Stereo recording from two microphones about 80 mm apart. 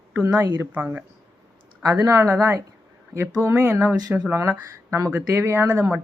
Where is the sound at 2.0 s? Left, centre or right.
Right.